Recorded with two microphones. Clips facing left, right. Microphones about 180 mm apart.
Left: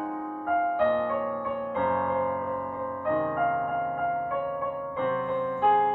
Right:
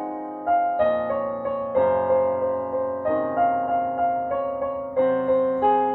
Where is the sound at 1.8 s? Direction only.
40° right (ahead or behind).